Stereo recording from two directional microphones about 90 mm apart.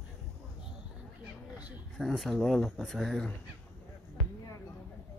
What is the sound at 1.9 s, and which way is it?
Speech, centre (ahead or behind).